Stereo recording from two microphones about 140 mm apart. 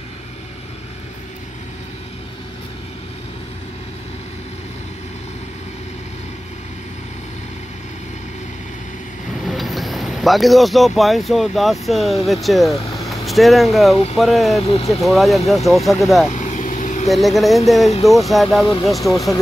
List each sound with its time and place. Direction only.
9.4 s speech: centre (ahead or behind)
12.9 s vehicle: centre (ahead or behind)
14.1 s speech: centre (ahead or behind)
14.6 s speech: 45° left (ahead or behind)
14.9 s speech: centre (ahead or behind)
16.3 s vehicle: 60° left (ahead or behind)
17.1 s speech: centre (ahead or behind)
18.9 s speech: 25° left (ahead or behind)